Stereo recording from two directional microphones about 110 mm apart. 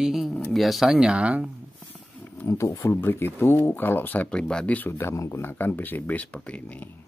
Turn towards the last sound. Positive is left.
turn(degrees=10)  # may be behind; listen again after turning